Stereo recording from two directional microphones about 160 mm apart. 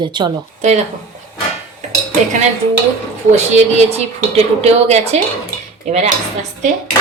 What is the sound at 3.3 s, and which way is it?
A woman's voice, 45° right (ahead or behind).